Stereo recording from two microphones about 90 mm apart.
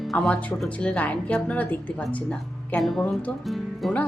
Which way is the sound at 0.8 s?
15° left (ahead or behind).